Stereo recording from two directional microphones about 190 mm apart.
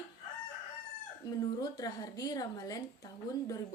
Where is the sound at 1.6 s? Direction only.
20° left (ahead or behind).